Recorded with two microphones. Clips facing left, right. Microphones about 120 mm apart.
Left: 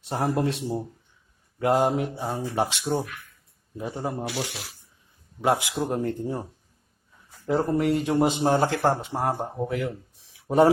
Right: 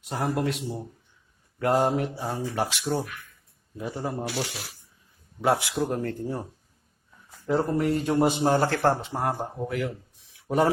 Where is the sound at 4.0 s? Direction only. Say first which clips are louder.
Left 1 dB; 10° left (ahead or behind).